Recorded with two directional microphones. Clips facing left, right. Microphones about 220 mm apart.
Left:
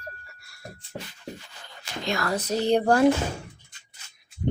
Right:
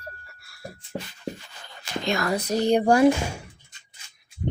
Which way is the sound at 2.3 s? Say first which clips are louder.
Right 1 dB; 10° right (ahead or behind).